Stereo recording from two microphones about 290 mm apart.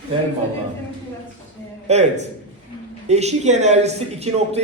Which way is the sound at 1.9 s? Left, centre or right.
Right.